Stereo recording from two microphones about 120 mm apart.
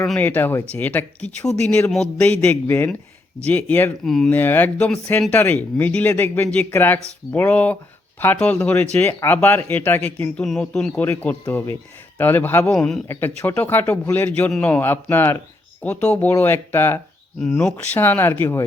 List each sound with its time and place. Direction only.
0.0 s speech: 10° left (ahead or behind)
4.0 s speech: 5° left (ahead or behind)
4.4 s speech: 15° left (ahead or behind)
11.6 s speech: 25° left (ahead or behind)
12.7 s speech: 5° left (ahead or behind)
13.1 s speech: 20° left (ahead or behind)